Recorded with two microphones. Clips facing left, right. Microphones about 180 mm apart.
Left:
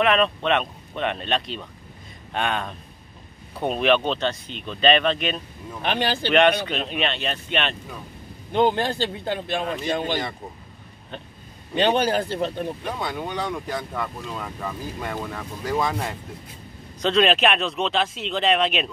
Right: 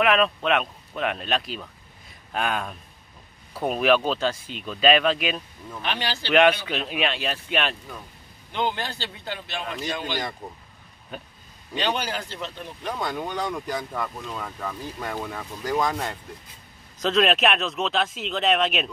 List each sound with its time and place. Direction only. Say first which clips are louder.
0.0 s speech: left 1 dB; 5° right (ahead or behind)
5.8 s speech: left 5 dB; 50° left (ahead or behind)
6.7 s speech: left 1 dB; 5° right (ahead or behind)
8.5 s speech: left 7 dB; 45° left (ahead or behind)
11.8 s speech: left 7 dB; 50° left (ahead or behind)
12.8 s speech: even; 5° left (ahead or behind)